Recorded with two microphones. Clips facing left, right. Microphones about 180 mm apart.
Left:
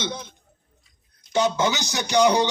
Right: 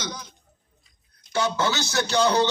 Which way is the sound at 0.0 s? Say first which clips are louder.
Left 4 dB; 25° left (ahead or behind).